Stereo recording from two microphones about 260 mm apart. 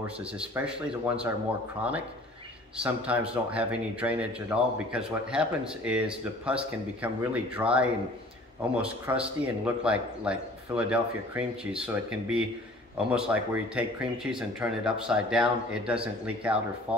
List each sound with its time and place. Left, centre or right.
0.0 s speech: centre